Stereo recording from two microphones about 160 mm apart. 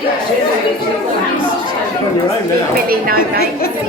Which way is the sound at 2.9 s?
65° right (ahead or behind).